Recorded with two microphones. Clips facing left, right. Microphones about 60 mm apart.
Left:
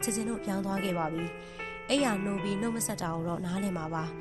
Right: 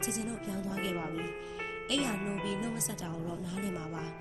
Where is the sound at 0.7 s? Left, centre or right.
Left.